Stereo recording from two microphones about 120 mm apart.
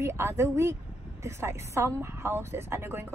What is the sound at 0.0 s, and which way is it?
Speech, 20° right (ahead or behind).